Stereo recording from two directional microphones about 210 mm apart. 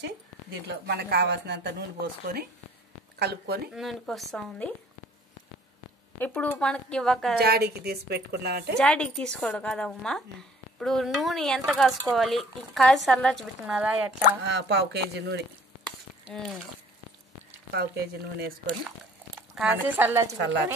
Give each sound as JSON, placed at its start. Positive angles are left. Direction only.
{"t": 0.7, "sound": "speech", "side_deg": -50}
{"t": 3.7, "sound": "speech", "side_deg": 0}
{"t": 6.1, "sound": "speech", "side_deg": 10}
{"t": 7.3, "sound": "speech", "side_deg": -50}
{"t": 8.7, "sound": "speech", "side_deg": 5}
{"t": 14.4, "sound": "speech", "side_deg": -55}
{"t": 16.3, "sound": "speech", "side_deg": 0}
{"t": 17.7, "sound": "speech", "side_deg": -50}
{"t": 19.5, "sound": "speech", "side_deg": -5}